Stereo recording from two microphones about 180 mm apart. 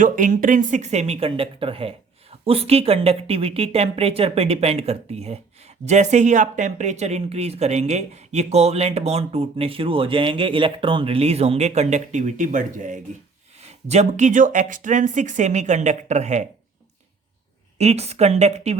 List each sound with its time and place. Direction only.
0.0 s a woman's voice: 45° right (ahead or behind)
17.7 s a woman's voice: 35° right (ahead or behind)